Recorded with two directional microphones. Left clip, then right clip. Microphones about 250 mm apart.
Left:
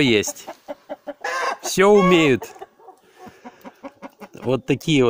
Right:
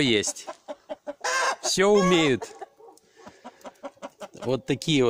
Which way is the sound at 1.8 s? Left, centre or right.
Centre.